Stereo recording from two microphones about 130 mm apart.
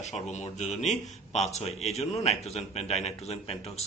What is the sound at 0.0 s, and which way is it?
A man's voice, 60° left (ahead or behind).